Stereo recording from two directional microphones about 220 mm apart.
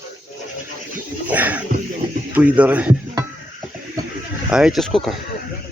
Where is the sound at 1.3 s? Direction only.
5° right (ahead or behind).